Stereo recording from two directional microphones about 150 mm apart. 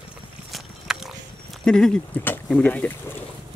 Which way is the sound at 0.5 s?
5° right (ahead or behind).